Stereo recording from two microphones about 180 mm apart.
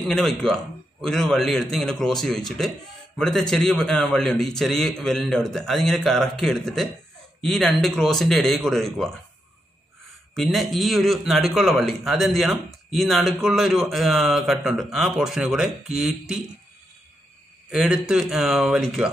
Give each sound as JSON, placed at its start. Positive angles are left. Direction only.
{"t": 0.1, "sound": "a man's voice", "side_deg": 0}
{"t": 10.5, "sound": "a man's voice", "side_deg": 0}
{"t": 17.6, "sound": "a man's voice", "side_deg": -5}